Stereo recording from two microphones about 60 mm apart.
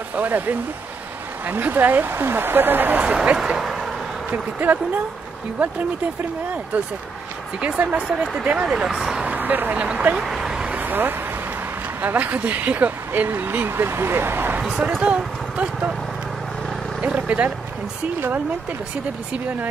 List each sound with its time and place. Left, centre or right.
0.1 s speech: right
3.0 s speech: centre
3.4 s a sound: centre
4.3 s speech: right
7.6 s speech: right
8.1 s speech: centre
9.2 s speech: right
10.1 s speech: centre
10.6 s vehicle: right
12.0 s speech: right
15.0 s speech: right
17.0 s speech: right